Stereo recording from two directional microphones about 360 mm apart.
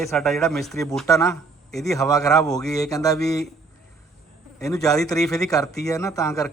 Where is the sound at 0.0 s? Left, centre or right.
Centre.